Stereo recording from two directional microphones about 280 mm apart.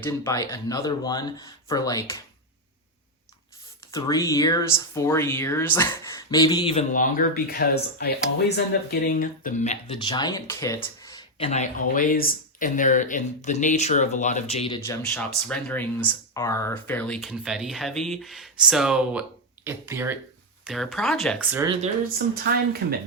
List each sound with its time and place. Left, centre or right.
0.0 s speech: centre
3.9 s speech: centre